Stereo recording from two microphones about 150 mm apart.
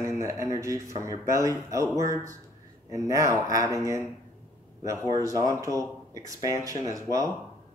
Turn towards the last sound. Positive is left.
turn(degrees=-25)  # may be behind; listen again after turning